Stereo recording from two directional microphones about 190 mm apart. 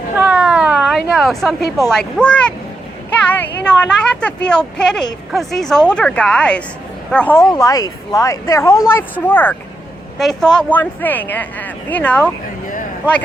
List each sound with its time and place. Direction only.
0.2 s a sound: 5° right (ahead or behind)
1.9 s a woman's voice: 5° left (ahead or behind)
7.5 s speech: 20° left (ahead or behind)